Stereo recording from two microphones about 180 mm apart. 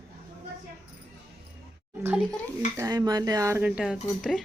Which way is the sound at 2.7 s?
15° right (ahead or behind).